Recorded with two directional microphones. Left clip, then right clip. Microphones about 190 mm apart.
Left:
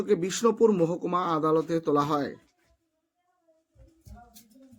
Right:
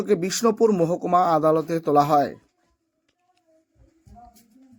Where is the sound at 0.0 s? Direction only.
15° right (ahead or behind).